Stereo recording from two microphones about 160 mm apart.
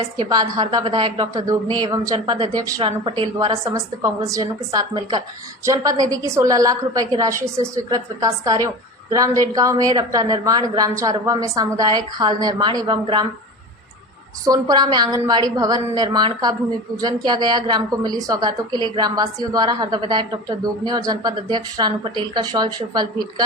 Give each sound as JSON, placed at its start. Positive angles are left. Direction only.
{"t": 0.2, "sound": "a woman's voice", "side_deg": -25}
{"t": 3.6, "sound": "a woman's voice", "side_deg": -20}
{"t": 14.4, "sound": "a woman's voice", "side_deg": -25}